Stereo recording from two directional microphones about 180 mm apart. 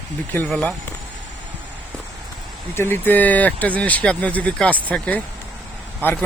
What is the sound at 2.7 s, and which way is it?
Speech, 15° left (ahead or behind).